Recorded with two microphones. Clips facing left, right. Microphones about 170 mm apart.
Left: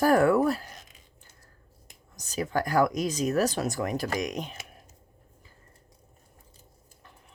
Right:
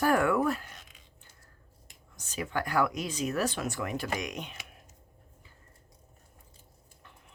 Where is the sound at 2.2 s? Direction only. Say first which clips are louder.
Left 5 dB; 40° left (ahead or behind).